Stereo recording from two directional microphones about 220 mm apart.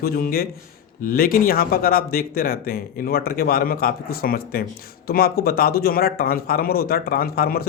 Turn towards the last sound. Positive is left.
turn(degrees=45)  # may be behind; listen again after turning